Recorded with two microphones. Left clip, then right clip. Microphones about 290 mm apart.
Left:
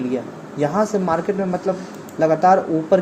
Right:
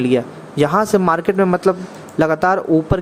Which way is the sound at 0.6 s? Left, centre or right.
Right.